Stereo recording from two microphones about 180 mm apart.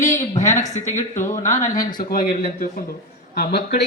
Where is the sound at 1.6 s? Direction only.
20° left (ahead or behind).